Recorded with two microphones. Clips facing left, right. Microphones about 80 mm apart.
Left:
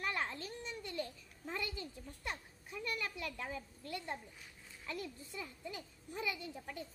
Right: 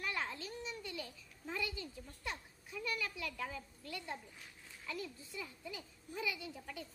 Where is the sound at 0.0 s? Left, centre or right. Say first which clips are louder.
Left 2 dB; left.